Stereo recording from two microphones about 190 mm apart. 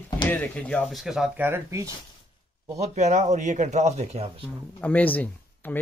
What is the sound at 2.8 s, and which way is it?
Speech, 35° right (ahead or behind).